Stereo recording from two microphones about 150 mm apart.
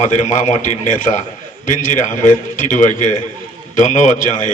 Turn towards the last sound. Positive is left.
turn(degrees=60)  # may be behind; listen again after turning